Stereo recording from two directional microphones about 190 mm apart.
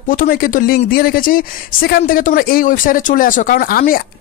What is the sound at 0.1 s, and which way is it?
Speech, 50° left (ahead or behind).